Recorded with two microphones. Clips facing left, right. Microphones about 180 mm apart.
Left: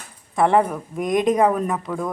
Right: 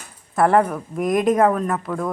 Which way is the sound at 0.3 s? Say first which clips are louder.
Right 1 dB; centre (ahead or behind).